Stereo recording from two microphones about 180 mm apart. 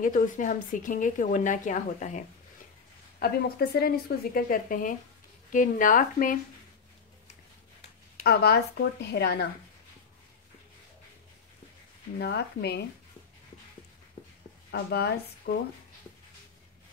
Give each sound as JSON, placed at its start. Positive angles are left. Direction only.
{"t": 0.0, "sound": "a woman's voice", "side_deg": 45}
{"t": 3.2, "sound": "a woman's voice", "side_deg": 60}
{"t": 8.2, "sound": "a woman's voice", "side_deg": 60}
{"t": 12.2, "sound": "a woman's voice", "side_deg": 65}
{"t": 14.7, "sound": "a woman's voice", "side_deg": 65}